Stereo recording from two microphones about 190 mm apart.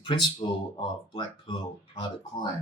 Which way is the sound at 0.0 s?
25° left (ahead or behind).